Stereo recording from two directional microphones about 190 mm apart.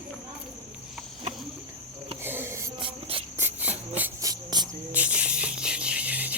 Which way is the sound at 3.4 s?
10° right (ahead or behind).